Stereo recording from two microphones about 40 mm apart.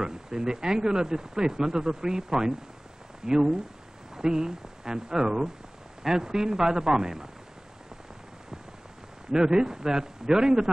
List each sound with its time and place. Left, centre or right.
0.0 s speech: centre
9.3 s speech: centre